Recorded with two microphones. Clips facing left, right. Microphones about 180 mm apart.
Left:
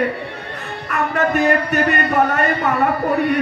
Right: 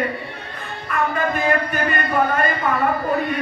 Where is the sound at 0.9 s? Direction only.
70° left (ahead or behind).